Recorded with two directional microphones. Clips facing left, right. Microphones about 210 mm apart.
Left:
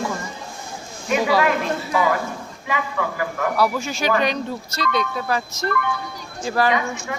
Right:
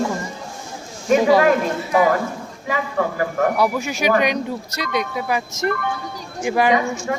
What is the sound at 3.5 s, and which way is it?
Speech, 15° right (ahead or behind).